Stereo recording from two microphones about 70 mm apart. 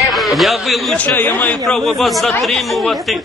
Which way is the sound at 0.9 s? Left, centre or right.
Left.